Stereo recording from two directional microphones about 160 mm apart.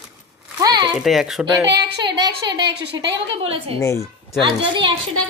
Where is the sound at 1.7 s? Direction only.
90° right.